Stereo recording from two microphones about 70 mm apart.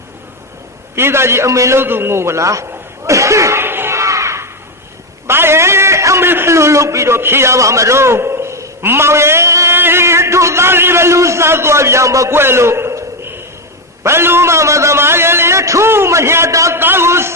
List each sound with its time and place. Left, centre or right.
0.9 s a man's voice: right
1.8 s a man's voice: right
3.1 s a sound: right
3.9 s a sound: right
6.2 s a man's voice: right
9.7 s a man's voice: right
12.3 s a sound: right
14.0 s a man's voice: right
16.7 s a man's voice: right